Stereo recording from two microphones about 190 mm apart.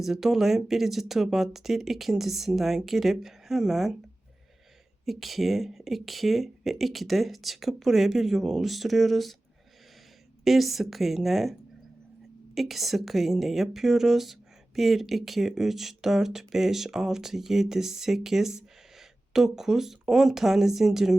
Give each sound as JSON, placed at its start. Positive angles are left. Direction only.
{"t": 0.0, "sound": "speech", "side_deg": 0}
{"t": 5.0, "sound": "speech", "side_deg": 0}
{"t": 10.4, "sound": "speech", "side_deg": 0}
{"t": 12.5, "sound": "speech", "side_deg": 0}